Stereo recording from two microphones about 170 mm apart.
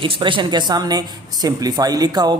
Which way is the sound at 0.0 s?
30° right (ahead or behind).